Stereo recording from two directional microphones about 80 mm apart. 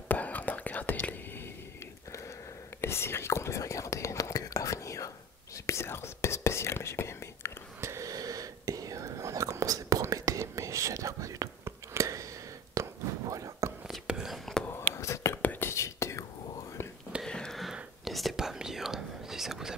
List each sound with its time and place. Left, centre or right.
0.1 s whispering: left
2.8 s whispering: left
7.8 s whispering: right
12.8 s a sound: right
13.8 s whispering: centre
14.3 s whispering: centre
14.7 s whispering: left
17.2 s a sound: centre
18.0 s whispering: centre